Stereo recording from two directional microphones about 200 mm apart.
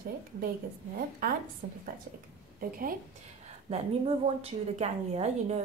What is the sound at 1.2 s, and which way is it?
Speech, 45° right (ahead or behind).